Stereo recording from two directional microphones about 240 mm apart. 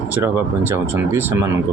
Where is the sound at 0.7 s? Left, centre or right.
Centre.